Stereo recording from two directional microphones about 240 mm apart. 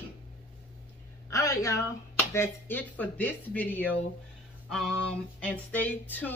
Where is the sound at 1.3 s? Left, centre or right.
Centre.